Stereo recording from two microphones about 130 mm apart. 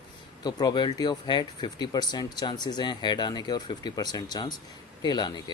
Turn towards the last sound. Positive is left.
turn(degrees=35)  # may be behind; listen again after turning